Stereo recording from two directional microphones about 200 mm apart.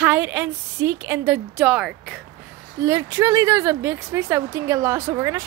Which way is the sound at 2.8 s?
15° right (ahead or behind).